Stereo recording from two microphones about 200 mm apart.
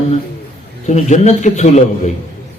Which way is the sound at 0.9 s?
35° left (ahead or behind).